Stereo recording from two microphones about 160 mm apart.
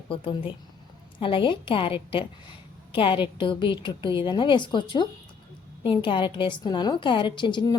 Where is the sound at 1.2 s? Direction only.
30° left (ahead or behind).